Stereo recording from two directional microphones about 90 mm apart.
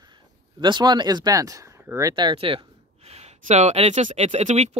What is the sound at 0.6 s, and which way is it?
Speech, 60° right (ahead or behind).